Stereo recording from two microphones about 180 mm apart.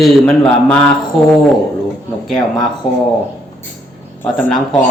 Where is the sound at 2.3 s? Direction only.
5° left (ahead or behind).